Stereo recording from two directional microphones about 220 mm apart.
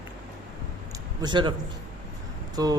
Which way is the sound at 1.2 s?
20° right (ahead or behind).